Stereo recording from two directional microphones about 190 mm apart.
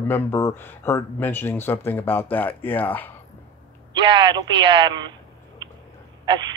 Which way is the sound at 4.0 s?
25° right (ahead or behind).